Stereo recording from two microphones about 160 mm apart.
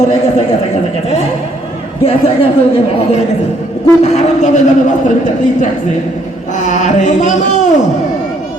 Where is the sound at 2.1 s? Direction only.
40° left (ahead or behind).